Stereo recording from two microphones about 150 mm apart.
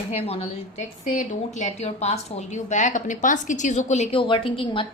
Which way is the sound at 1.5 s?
50° left (ahead or behind).